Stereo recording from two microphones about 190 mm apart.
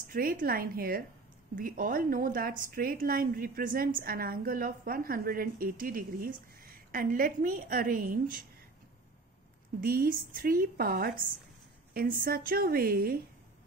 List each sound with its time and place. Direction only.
0.1 s a woman's voice: 50° right (ahead or behind)
9.8 s a woman's voice: 50° right (ahead or behind)